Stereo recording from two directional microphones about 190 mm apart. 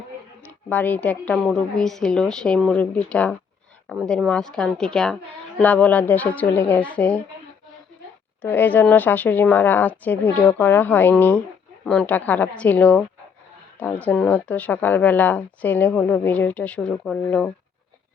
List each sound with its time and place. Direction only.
0.7 s a woman's voice: 10° left (ahead or behind)
8.4 s speech: 10° left (ahead or behind)